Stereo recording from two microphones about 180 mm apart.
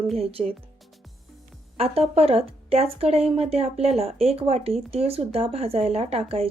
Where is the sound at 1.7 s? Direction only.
35° right (ahead or behind).